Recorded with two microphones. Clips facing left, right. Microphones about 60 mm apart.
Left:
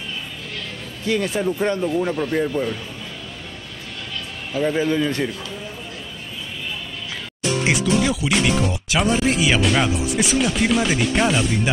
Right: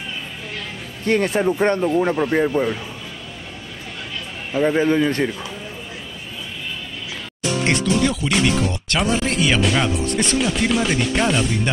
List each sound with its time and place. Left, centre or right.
1.0 s speech: right
1.8 s speech: right
4.5 s speech: centre
7.6 s speech: centre